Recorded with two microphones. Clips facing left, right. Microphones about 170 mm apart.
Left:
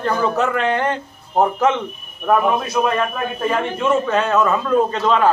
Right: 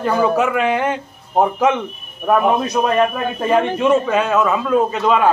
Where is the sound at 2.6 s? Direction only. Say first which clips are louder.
Right 3 dB; 20° right (ahead or behind).